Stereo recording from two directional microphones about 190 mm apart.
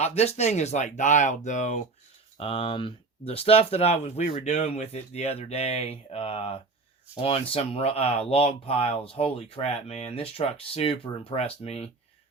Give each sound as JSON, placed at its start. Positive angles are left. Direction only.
{"t": 0.0, "sound": "speech", "side_deg": 35}
{"t": 2.4, "sound": "speech", "side_deg": 30}